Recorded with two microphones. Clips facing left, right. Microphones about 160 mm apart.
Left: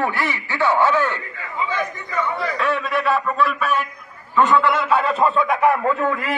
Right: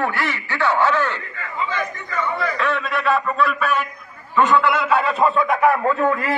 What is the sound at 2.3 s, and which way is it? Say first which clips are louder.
A man's voice: even; 5° left (ahead or behind).